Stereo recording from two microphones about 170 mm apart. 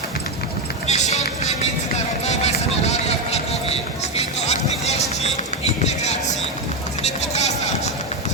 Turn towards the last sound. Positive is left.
turn(degrees=40)  # may be behind; listen again after turning